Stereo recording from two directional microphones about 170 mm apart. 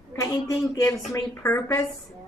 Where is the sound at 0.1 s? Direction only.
20° left (ahead or behind).